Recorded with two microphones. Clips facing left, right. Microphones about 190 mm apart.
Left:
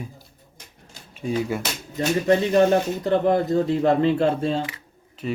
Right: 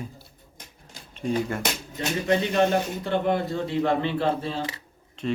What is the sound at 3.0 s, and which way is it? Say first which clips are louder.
A man's voice: left 5 dB; 35° left (ahead or behind).